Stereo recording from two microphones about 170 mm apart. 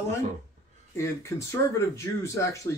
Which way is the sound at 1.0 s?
15° left (ahead or behind).